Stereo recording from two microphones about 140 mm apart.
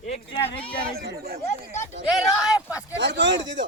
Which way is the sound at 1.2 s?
90° right.